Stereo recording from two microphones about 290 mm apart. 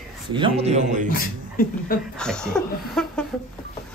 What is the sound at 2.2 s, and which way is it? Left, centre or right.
Laughter, centre.